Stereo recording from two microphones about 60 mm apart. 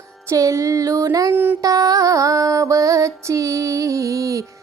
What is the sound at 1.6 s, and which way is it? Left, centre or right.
Music, right.